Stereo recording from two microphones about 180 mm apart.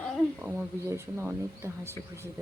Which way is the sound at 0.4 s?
10° right (ahead or behind).